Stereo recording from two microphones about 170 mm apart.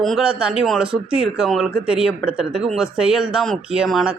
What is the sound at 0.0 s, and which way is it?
Speech, centre (ahead or behind).